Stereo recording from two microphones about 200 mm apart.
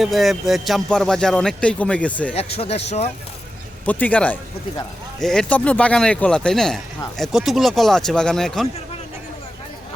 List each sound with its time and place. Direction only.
0.0 s speech: centre (ahead or behind)
2.3 s speech: 30° left (ahead or behind)
3.8 s speech: 10° left (ahead or behind)